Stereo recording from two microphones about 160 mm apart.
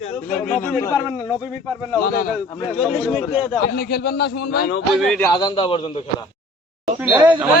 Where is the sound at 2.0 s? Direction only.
70° left (ahead or behind).